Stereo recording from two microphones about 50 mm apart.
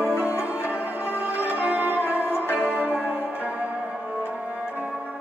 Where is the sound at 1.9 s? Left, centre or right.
Left.